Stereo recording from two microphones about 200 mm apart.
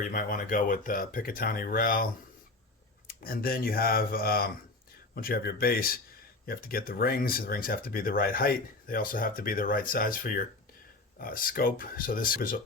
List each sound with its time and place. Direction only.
0.0 s speech: 45° left (ahead or behind)
3.2 s speech: 45° left (ahead or behind)